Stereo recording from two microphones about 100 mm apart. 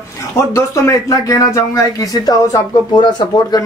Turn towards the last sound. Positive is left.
turn(degrees=45)  # may be behind; listen again after turning